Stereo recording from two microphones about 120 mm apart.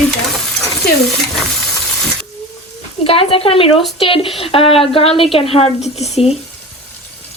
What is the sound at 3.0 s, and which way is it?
A woman's voice, 50° left (ahead or behind).